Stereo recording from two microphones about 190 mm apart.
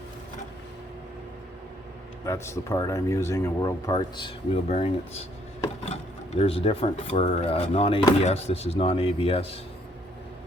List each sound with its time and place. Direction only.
2.2 s speech: 15° left (ahead or behind)
4.7 s speech: 30° left (ahead or behind)